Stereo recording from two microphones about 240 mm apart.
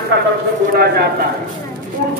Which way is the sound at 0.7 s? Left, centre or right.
Right.